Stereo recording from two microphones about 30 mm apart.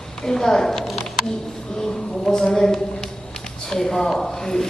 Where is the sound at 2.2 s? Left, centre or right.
Centre.